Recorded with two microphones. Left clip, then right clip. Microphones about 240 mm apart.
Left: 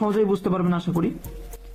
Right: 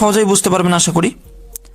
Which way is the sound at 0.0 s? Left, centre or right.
Right.